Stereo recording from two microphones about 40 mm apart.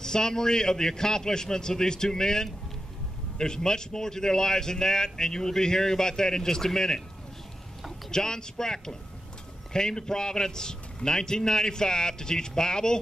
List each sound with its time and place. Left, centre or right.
0.0 s speech: centre
8.1 s speech: centre